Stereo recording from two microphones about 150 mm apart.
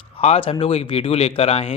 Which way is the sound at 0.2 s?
40° left (ahead or behind).